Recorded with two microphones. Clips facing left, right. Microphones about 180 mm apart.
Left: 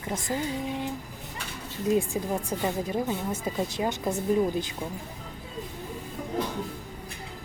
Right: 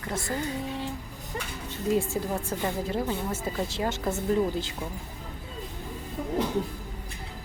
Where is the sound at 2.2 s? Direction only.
15° left (ahead or behind).